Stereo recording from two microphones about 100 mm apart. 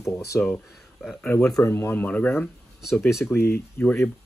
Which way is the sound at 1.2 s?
20° left (ahead or behind).